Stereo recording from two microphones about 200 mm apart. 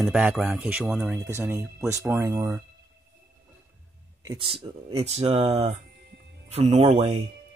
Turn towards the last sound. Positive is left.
turn(degrees=-30)  # may be behind; listen again after turning